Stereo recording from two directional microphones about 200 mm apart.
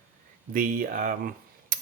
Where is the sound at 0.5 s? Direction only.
40° right (ahead or behind).